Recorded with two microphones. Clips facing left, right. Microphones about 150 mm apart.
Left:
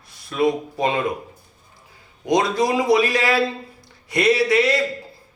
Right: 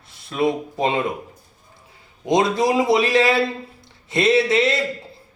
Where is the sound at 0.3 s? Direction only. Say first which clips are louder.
Left 1 dB; 25° right (ahead or behind).